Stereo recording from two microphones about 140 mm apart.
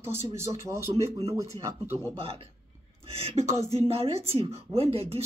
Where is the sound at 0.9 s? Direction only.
50° right (ahead or behind).